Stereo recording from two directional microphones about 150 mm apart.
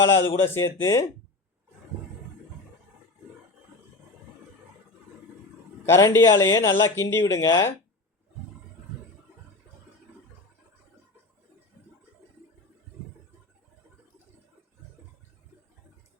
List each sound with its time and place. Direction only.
0.1 s speech: 20° left (ahead or behind)
5.9 s speech: 20° left (ahead or behind)